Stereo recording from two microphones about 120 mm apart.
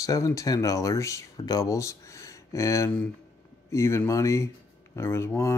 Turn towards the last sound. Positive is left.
turn(degrees=20)  # may be behind; listen again after turning